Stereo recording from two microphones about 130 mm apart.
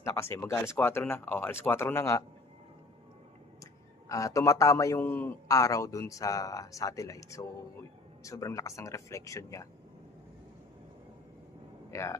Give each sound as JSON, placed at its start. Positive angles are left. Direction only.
{"t": 0.0, "sound": "a man's voice", "side_deg": 20}
{"t": 4.1, "sound": "a man's voice", "side_deg": 25}
{"t": 11.9, "sound": "speech", "side_deg": 20}